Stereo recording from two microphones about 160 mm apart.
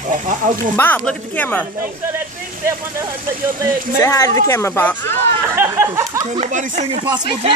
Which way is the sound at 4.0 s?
20° left (ahead or behind).